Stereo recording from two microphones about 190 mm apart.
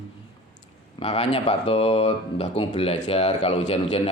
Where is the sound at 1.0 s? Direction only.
35° left (ahead or behind).